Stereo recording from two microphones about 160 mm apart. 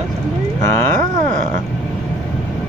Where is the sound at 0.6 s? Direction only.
15° left (ahead or behind).